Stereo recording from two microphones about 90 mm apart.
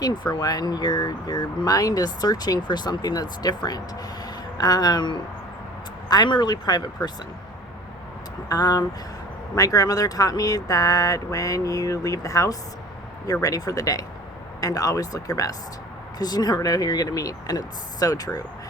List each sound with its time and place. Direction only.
0.0 s speech: 50° left (ahead or behind)
8.4 s speech: 45° left (ahead or behind)